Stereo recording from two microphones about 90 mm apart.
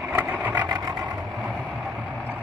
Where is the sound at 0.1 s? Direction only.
15° right (ahead or behind).